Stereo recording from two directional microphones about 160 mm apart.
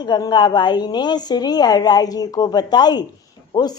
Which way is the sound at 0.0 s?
25° left (ahead or behind).